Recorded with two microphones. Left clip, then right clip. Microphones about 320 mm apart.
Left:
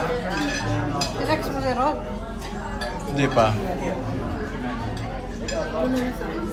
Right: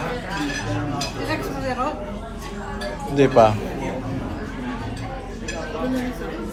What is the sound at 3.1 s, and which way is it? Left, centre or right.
Speech, centre.